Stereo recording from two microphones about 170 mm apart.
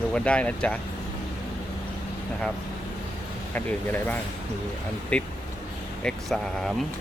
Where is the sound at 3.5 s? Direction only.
10° left (ahead or behind).